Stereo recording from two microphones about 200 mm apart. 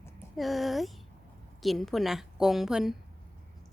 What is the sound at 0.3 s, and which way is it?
Speech, centre (ahead or behind).